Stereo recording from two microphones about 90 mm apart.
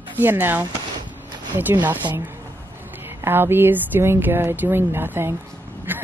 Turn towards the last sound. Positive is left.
turn(degrees=-20)  # may be behind; listen again after turning